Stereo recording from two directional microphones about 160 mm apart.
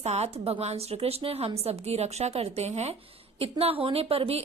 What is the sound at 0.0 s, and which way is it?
A woman's voice, 45° right (ahead or behind).